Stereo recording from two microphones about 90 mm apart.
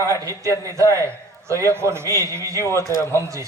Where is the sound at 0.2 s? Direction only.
35° right (ahead or behind).